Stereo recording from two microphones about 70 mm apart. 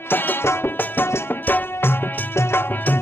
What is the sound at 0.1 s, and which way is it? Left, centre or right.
Music, left.